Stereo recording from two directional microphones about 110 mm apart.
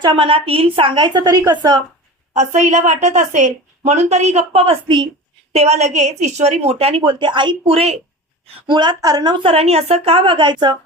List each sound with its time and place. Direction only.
0.0 s a woman's voice: 50° right (ahead or behind)
2.3 s a woman's voice: 90° right; by 5.0 s 55° right (ahead or behind)
5.5 s a woman's voice: 80° right; by 7.9 s 65° right (ahead or behind)
8.6 s a woman's voice: 40° right (ahead or behind)